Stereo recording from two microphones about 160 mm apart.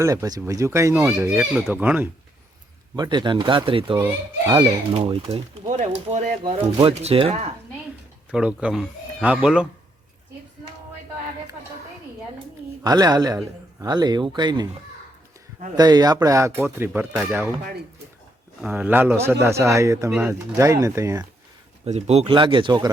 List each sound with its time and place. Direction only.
0.0 s a man's voice: 20° right (ahead or behind)
2.9 s a man's voice: 25° right (ahead or behind)
5.6 s speech: 50° right (ahead or behind)
6.8 s speech: 35° right (ahead or behind)
8.3 s speech: 5° right (ahead or behind)
12.8 s a man's voice: 25° right (ahead or behind)
15.7 s speech: 25° right (ahead or behind)
18.6 s a man's voice: 10° right (ahead or behind)
21.8 s speech: 45° right (ahead or behind)